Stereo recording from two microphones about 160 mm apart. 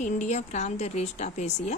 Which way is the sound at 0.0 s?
45° left (ahead or behind).